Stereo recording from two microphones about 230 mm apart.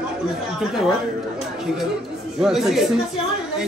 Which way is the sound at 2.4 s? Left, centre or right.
Centre.